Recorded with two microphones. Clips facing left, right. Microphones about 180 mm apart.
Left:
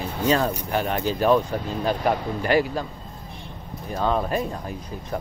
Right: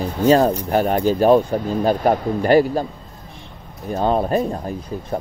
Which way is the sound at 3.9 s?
35° right (ahead or behind).